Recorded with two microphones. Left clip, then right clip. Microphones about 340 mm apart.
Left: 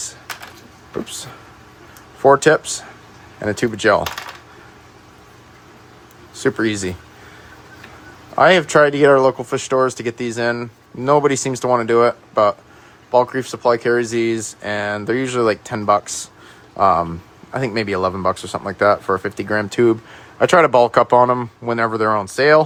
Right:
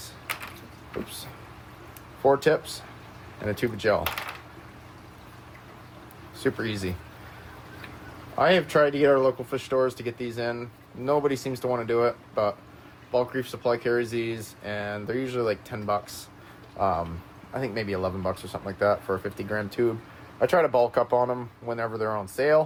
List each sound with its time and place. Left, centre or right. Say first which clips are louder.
2.4 s speech: left 9 dB; left
6.4 s speech: left 10 dB; left
8.4 s speech: left 9 dB; left
17.5 s speech: left 9 dB; left